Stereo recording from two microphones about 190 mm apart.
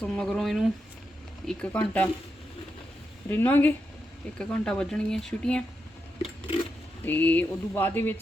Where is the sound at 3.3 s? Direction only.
10° left (ahead or behind).